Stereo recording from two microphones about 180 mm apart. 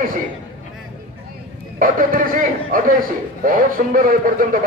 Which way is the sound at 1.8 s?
50° right (ahead or behind).